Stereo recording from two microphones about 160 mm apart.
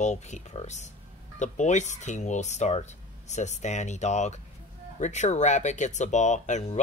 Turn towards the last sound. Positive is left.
turn(degrees=50)  # may be behind; listen again after turning